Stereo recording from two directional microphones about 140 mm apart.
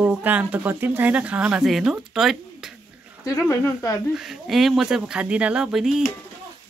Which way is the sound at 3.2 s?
20° left (ahead or behind).